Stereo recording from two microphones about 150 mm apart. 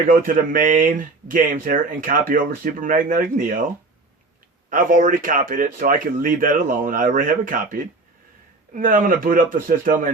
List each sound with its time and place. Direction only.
0.1 s speech: 70° right (ahead or behind)
4.7 s speech: 65° right (ahead or behind)